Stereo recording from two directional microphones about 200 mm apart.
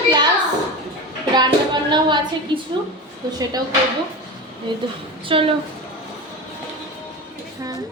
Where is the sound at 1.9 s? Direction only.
20° right (ahead or behind).